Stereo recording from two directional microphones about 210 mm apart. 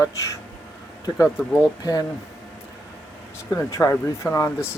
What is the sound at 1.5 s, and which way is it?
Speech, 15° left (ahead or behind).